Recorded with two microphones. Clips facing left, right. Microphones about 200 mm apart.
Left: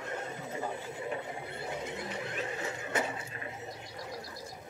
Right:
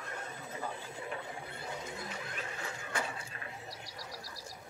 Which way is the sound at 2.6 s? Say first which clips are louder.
Left 4 dB; 20° left (ahead or behind).